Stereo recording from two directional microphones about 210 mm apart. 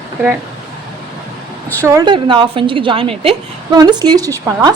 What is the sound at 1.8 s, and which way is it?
A woman's voice, 20° right (ahead or behind).